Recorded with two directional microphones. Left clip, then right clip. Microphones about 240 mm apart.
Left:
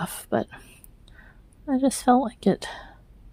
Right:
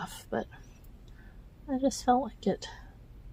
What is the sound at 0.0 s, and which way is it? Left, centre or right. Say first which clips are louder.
Speech: left 8 dB; left.